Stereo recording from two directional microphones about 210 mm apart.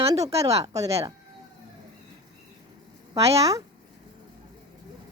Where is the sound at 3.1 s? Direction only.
15° right (ahead or behind).